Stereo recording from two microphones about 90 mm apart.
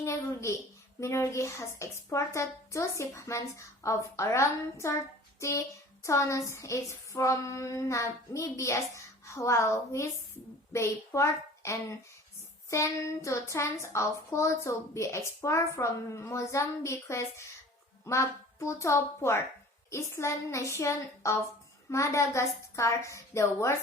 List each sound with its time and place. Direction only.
0.0 s a child's voice: 35° left (ahead or behind)